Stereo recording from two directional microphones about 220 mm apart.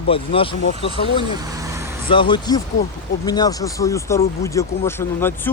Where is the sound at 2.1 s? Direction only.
20° left (ahead or behind).